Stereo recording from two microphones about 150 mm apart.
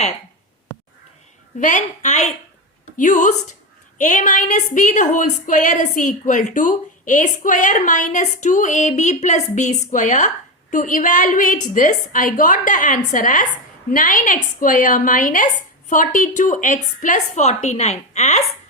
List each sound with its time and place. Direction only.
1.5 s a woman's voice: 55° left (ahead or behind)